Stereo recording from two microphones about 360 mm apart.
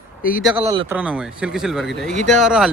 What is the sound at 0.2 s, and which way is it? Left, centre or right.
Speech, left.